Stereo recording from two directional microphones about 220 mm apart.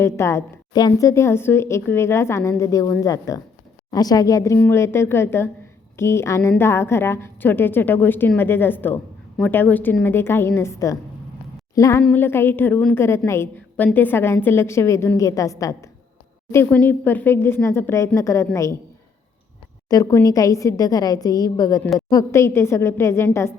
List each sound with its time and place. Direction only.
0.0 s a woman's voice: 10° left (ahead or behind)
19.9 s a woman's voice: 15° left (ahead or behind)